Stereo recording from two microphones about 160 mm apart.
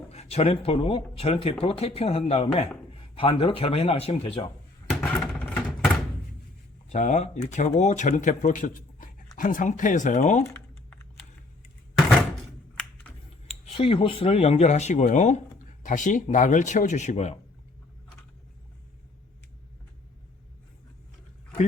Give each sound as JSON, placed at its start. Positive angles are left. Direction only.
{"t": 0.1, "sound": "speech", "side_deg": 40}
{"t": 4.9, "sound": "a sound", "side_deg": 5}
{"t": 6.9, "sound": "speech", "side_deg": 45}
{"t": 10.4, "sound": "typing", "side_deg": 15}
{"t": 13.0, "sound": "computer keyboard", "side_deg": 10}
{"t": 13.7, "sound": "speech", "side_deg": 35}